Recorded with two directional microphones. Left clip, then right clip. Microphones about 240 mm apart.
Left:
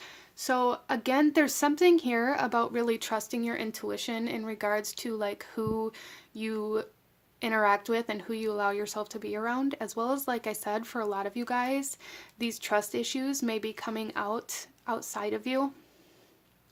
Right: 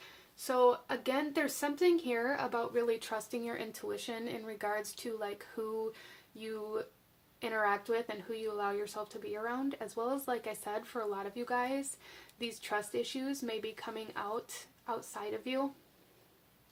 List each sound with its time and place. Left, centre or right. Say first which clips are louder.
0.3 s speech: left 1 dB; left